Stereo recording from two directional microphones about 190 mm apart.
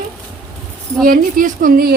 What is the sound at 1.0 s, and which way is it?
Speech, 50° right (ahead or behind).